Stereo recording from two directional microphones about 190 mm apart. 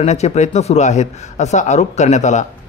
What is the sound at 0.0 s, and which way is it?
Speech, 35° left (ahead or behind).